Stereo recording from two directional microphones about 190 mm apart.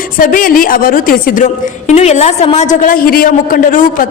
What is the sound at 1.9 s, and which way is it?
A man's voice, 35° left (ahead or behind).